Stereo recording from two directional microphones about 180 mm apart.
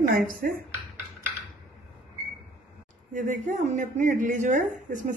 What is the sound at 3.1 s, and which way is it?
Speech, 45° right (ahead or behind).